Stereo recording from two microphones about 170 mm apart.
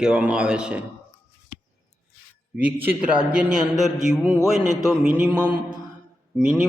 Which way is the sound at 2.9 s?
5° right (ahead or behind).